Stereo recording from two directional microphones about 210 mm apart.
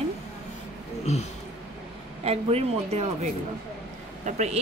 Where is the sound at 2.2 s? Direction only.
30° right (ahead or behind).